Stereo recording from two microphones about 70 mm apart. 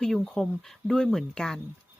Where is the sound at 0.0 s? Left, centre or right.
Centre.